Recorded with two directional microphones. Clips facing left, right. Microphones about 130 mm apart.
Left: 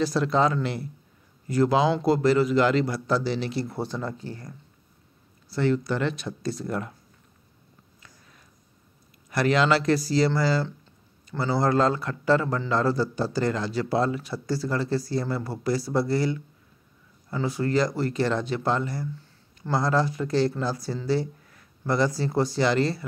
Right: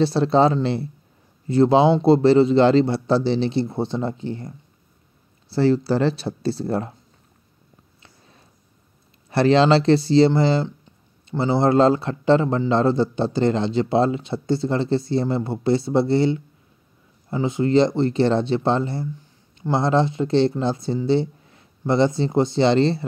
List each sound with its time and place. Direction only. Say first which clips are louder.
0.0 s speech: right 6 dB; 30° right (ahead or behind)
8.0 s a sound: right 3 dB; 30° right (ahead or behind)
9.3 s speech: right 6 dB; 30° right (ahead or behind)
19.1 s speech: even; 15° right (ahead or behind)